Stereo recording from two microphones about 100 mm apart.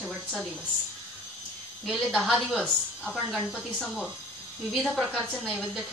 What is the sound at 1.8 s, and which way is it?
Speech, 5° right (ahead or behind).